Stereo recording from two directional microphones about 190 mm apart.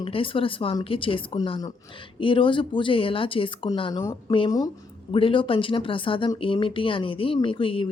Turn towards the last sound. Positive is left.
turn(degrees=30)  # may be behind; listen again after turning